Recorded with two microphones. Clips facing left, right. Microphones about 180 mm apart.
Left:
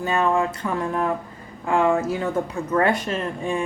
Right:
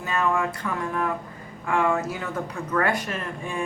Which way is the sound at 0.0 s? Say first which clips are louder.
Left 4 dB; 30° left (ahead or behind).